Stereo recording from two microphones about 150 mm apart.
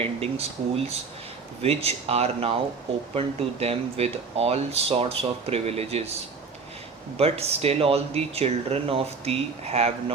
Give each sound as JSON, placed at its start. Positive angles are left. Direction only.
{"t": 0.0, "sound": "speech", "side_deg": -40}
{"t": 7.2, "sound": "speech", "side_deg": -40}